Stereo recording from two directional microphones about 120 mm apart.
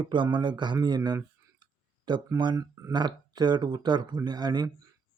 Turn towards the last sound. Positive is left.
turn(degrees=-35)  # may be behind; listen again after turning